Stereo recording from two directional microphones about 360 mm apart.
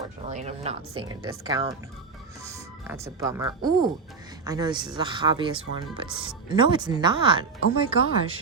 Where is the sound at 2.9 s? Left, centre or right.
Centre.